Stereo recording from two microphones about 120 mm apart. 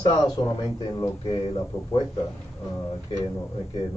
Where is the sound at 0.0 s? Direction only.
35° left (ahead or behind).